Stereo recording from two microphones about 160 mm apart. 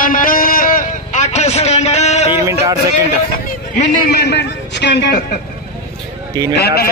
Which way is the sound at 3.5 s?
55° left (ahead or behind).